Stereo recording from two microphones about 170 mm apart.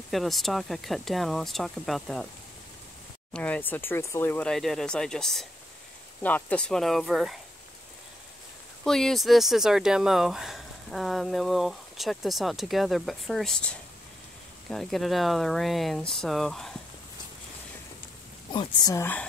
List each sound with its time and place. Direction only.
0.1 s speech: centre (ahead or behind)
3.3 s speech: 10° left (ahead or behind)
8.8 s speech: 5° left (ahead or behind)
18.5 s speech: 25° left (ahead or behind)